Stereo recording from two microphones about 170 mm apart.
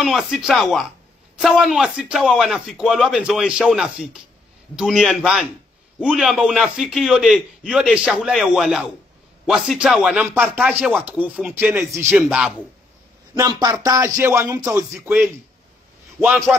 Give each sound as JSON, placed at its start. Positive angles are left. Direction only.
{"t": 0.0, "sound": "a man's voice", "side_deg": 0}
{"t": 13.3, "sound": "speech", "side_deg": -25}
{"t": 16.2, "sound": "speech", "side_deg": -15}